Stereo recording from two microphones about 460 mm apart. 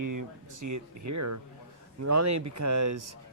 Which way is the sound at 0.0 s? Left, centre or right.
Right.